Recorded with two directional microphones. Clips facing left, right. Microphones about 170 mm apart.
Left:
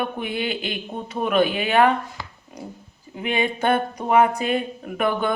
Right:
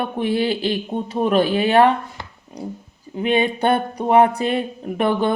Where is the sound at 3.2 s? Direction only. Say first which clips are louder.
Right 4 dB; 35° right (ahead or behind).